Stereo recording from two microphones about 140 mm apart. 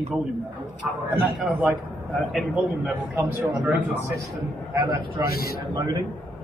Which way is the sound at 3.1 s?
10° right (ahead or behind).